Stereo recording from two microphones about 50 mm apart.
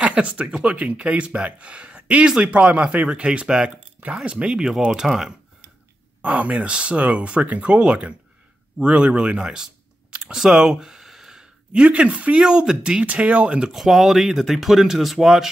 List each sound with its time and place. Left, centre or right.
0.0 s speech: right
4.6 s speech: centre
6.2 s speech: right
10.1 s a sound: centre
11.7 s speech: right
12.4 s speech: centre
13.0 s speech: right
13.7 s speech: centre